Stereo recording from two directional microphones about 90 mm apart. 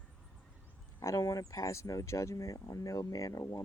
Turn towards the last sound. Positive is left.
turn(degrees=40)  # may be behind; listen again after turning